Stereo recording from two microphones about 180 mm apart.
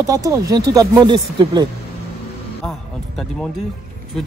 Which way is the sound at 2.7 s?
Centre (ahead or behind).